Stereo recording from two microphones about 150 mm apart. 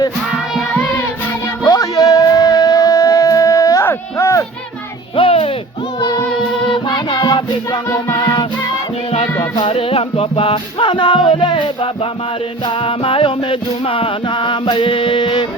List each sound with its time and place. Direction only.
0.3 s music: 5° right (ahead or behind)
0.7 s music: 15° left (ahead or behind)
1.6 s a sound: 25° left (ahead or behind)
5.1 s music: 35° left (ahead or behind)
6.0 s music: 25° left (ahead or behind)
9.4 s music: 35° left (ahead or behind)